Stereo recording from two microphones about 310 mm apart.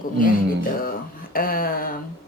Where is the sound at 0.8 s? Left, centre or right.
Left.